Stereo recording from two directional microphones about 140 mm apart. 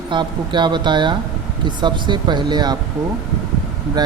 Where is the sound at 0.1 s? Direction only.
35° right (ahead or behind).